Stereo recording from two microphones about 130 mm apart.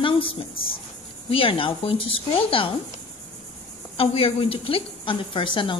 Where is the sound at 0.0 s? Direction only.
45° left (ahead or behind).